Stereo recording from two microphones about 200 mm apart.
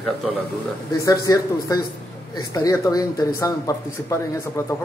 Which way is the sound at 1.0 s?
15° left (ahead or behind).